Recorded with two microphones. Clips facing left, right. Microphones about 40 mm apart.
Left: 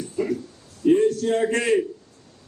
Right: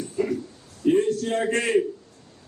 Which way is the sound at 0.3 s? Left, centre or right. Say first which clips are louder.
Left 1 dB; right.